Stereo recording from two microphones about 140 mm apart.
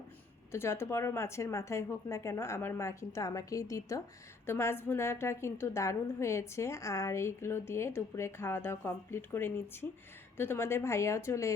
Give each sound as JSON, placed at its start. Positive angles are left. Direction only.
{"t": 0.5, "sound": "a woman's voice", "side_deg": 20}